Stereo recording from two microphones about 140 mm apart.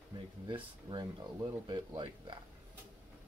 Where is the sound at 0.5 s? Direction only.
35° right (ahead or behind).